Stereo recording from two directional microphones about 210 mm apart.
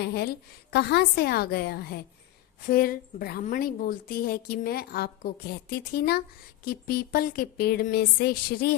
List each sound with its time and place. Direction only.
0.0 s a woman's voice: 50° left (ahead or behind)